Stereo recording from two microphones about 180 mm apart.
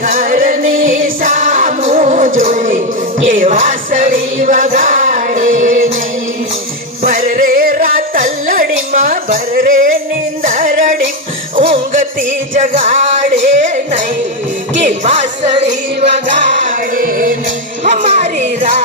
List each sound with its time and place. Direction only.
0.0 s music: 50° right (ahead or behind)
7.0 s music: 50° right (ahead or behind)
13.3 s a sound: 45° right (ahead or behind)
14.8 s music: 40° right (ahead or behind)